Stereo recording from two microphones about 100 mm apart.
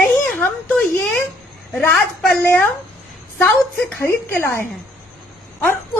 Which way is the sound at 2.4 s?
20° left (ahead or behind).